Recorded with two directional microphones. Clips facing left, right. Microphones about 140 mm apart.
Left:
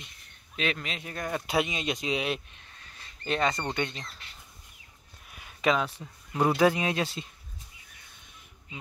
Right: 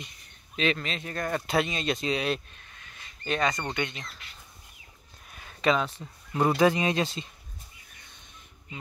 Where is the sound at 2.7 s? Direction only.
35° left (ahead or behind).